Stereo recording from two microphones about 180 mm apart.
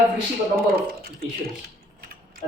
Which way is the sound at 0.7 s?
55° right (ahead or behind).